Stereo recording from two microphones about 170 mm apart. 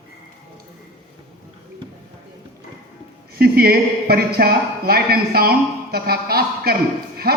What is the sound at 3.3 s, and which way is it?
A man's voice, 65° right (ahead or behind).